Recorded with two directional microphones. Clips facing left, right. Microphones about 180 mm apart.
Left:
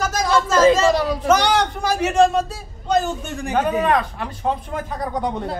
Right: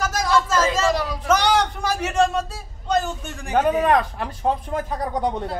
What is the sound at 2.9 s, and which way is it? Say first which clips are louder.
Speech: left 3 dB; 5° left (ahead or behind).